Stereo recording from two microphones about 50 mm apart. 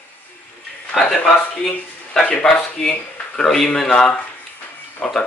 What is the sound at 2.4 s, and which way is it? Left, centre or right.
Speech, centre.